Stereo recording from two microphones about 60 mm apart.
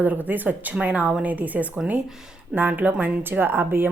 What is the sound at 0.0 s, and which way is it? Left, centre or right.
A woman's voice, right.